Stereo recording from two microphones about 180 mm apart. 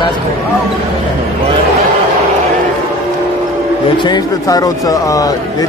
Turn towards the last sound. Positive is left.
turn(degrees=20)  # may be behind; listen again after turning